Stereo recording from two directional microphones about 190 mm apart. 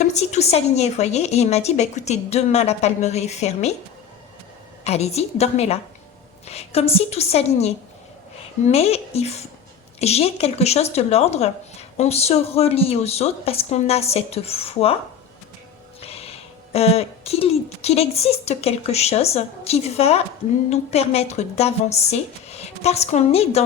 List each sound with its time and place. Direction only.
0.0 s speech: 35° left (ahead or behind)
4.8 s speech: 35° left (ahead or behind)
16.0 s speech: 30° left (ahead or behind)